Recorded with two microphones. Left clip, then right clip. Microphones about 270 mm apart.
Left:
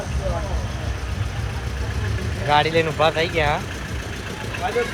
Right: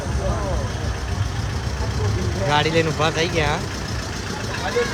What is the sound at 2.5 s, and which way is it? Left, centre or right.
Speech, centre.